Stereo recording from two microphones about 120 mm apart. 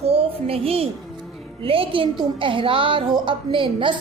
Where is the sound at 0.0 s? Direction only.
55° right (ahead or behind).